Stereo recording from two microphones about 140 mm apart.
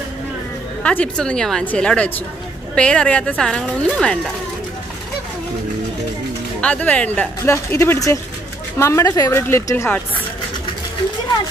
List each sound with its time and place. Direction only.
0.8 s speech: 10° left (ahead or behind)
6.6 s a woman's voice: 10° left (ahead or behind)